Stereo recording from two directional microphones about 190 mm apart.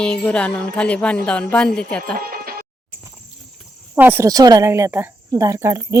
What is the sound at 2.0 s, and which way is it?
Music, 50° right (ahead or behind).